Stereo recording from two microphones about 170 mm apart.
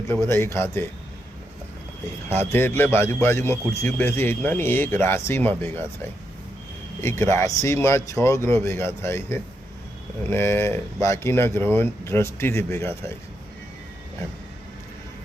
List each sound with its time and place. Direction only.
0.3 s a man's voice: 15° left (ahead or behind)
2.3 s a man's voice: 15° left (ahead or behind)
7.0 s a man's voice: 15° left (ahead or behind)